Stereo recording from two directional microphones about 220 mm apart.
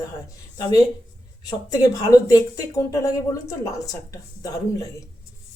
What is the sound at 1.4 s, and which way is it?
Speech, 15° left (ahead or behind).